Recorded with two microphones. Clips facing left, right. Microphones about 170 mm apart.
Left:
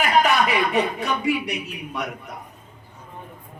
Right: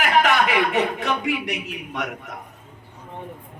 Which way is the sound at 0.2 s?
90° right.